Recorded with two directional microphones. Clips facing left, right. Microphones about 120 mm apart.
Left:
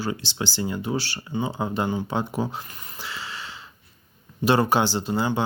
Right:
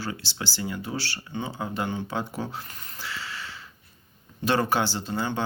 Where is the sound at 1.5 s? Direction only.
25° left (ahead or behind).